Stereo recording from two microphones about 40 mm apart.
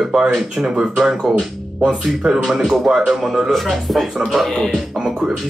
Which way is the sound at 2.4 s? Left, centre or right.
Centre.